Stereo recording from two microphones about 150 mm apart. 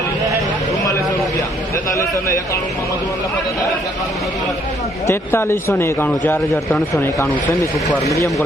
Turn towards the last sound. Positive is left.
turn(degrees=0)  # may be behind; listen again after turning